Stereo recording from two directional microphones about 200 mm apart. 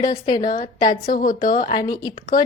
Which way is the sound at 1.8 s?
20° left (ahead or behind).